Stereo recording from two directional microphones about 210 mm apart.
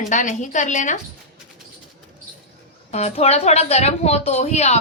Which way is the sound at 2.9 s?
30° left (ahead or behind).